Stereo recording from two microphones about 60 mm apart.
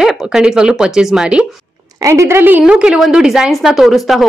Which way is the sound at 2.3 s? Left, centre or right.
Right.